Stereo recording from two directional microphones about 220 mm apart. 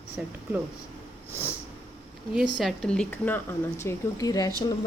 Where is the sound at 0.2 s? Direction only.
5° right (ahead or behind).